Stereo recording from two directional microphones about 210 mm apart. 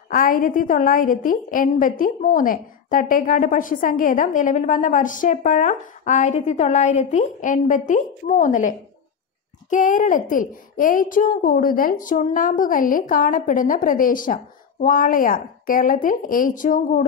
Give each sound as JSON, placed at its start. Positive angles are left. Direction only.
{"t": 0.1, "sound": "a woman's voice", "side_deg": 40}